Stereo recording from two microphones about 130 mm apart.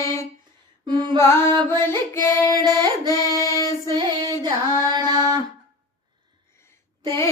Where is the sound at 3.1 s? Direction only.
25° left (ahead or behind).